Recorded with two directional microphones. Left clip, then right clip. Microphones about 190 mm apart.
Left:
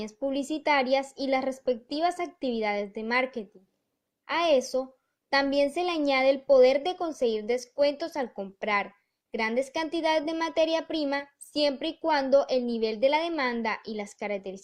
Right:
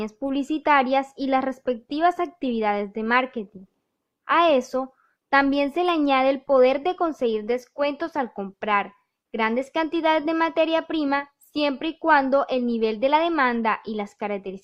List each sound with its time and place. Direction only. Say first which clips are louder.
0.2 s speech: right 2 dB; 20° right (ahead or behind)